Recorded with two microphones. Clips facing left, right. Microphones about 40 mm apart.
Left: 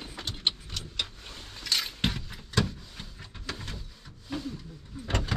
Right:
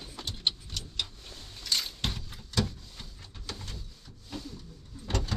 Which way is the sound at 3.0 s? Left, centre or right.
Left.